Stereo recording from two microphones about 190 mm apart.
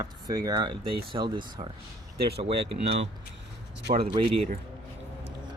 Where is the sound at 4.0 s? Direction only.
30° right (ahead or behind).